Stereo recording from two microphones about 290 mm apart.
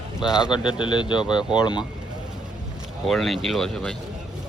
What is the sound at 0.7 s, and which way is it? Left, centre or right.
Speech, centre.